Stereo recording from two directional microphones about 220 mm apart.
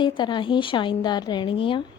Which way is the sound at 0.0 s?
20° left (ahead or behind).